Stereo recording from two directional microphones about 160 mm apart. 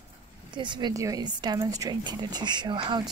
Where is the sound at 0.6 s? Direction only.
30° right (ahead or behind).